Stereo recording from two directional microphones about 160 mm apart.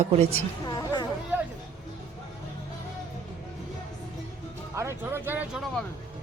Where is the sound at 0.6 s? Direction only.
25° left (ahead or behind).